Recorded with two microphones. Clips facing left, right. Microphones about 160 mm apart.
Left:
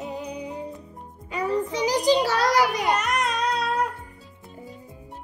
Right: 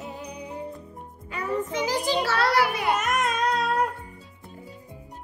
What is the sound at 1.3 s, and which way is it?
Music, 15° left (ahead or behind).